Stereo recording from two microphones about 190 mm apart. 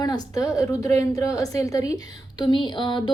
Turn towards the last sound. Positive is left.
turn(degrees=25)  # may be behind; listen again after turning